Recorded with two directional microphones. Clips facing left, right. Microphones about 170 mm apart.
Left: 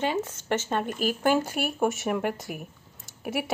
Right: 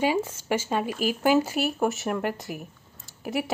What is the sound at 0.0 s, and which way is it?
Speech, 10° right (ahead or behind).